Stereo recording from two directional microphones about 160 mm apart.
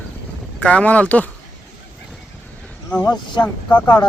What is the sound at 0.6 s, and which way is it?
Speech, 5° left (ahead or behind).